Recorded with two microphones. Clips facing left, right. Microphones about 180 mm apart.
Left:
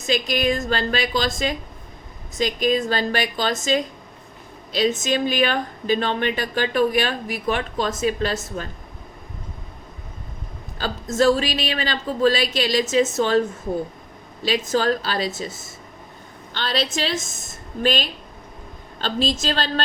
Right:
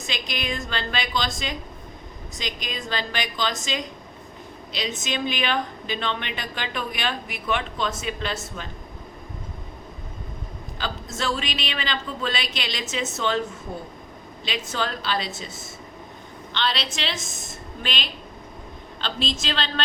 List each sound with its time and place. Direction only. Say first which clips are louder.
0.1 s a woman's voice: left 10 dB; 45° left (ahead or behind)
10.8 s a woman's voice: left 10 dB; 40° left (ahead or behind)
14.4 s a woman's voice: left 8 dB; 40° left (ahead or behind)
16.6 s a woman's voice: left 4 dB; 45° left (ahead or behind)